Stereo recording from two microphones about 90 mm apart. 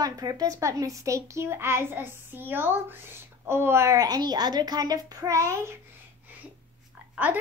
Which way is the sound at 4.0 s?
45° right (ahead or behind).